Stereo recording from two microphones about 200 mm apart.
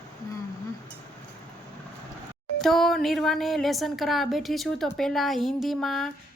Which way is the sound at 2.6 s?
Centre (ahead or behind).